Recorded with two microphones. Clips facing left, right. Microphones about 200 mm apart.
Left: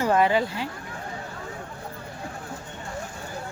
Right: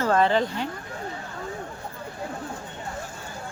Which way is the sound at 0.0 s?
10° left (ahead or behind).